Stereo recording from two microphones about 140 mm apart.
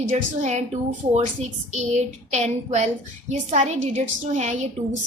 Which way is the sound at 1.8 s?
55° right (ahead or behind).